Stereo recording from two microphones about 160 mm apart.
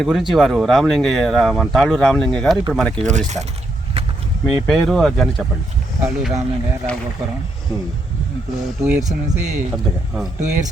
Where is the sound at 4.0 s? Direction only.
40° right (ahead or behind).